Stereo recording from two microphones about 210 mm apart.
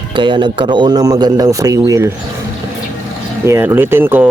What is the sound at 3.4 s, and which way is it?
Speech, 10° right (ahead or behind).